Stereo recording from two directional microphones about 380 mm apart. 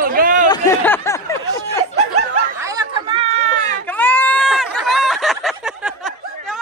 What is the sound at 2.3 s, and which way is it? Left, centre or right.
Chatter, centre.